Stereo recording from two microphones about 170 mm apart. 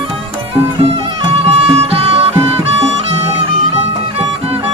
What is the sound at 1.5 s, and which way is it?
Music, 35° right (ahead or behind).